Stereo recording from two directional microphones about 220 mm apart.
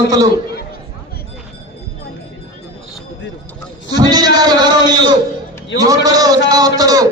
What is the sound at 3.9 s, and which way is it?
A man's voice, 20° right (ahead or behind).